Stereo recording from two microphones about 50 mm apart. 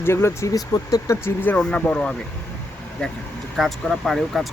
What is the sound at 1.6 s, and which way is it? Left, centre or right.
Speech, left.